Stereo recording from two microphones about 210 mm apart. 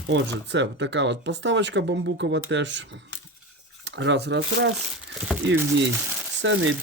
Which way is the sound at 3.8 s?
60° right (ahead or behind).